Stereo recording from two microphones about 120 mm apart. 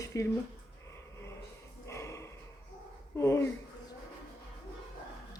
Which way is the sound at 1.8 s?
25° left (ahead or behind).